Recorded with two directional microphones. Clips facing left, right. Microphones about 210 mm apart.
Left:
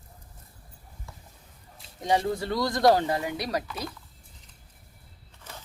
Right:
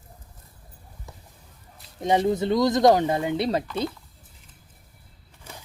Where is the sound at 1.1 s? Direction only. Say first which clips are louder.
Right 3 dB; 20° right (ahead or behind).